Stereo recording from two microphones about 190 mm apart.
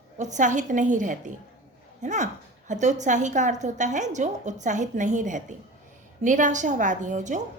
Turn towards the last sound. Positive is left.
turn(degrees=-40)  # may be behind; listen again after turning